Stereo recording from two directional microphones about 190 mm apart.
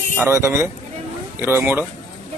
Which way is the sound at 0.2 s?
15° right (ahead or behind).